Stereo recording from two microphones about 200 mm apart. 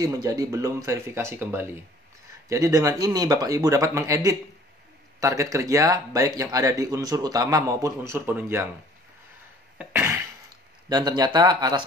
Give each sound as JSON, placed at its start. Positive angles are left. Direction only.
{"t": 0.0, "sound": "speech", "side_deg": -20}
{"t": 9.8, "sound": "throat clearing", "side_deg": -10}
{"t": 10.9, "sound": "speech", "side_deg": -20}